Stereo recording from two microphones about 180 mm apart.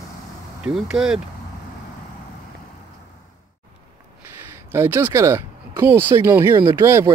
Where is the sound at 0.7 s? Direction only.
5° right (ahead or behind).